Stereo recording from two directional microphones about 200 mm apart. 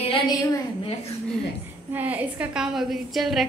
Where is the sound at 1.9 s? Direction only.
10° right (ahead or behind).